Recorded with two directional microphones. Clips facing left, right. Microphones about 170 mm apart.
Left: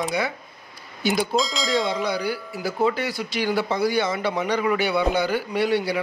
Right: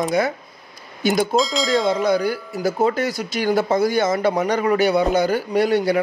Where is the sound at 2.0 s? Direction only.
45° right (ahead or behind).